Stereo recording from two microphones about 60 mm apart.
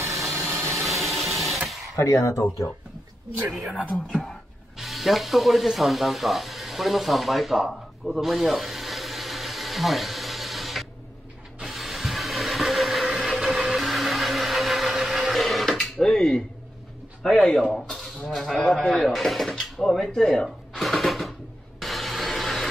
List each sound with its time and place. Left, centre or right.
0.3 s a sound: right
0.8 s a sound: centre
2.0 s speech: left
4.1 s speech: centre
4.7 s music: centre
11.6 s a sound: centre
13.0 s blender: centre
17.2 s speech: centre
18.7 s drawer open or close: centre